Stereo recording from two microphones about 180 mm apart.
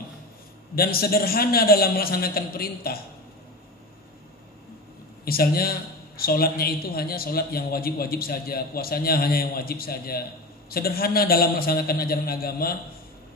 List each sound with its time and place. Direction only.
0.7 s a man's voice: 55° left (ahead or behind)
5.2 s a man's voice: 55° left (ahead or behind)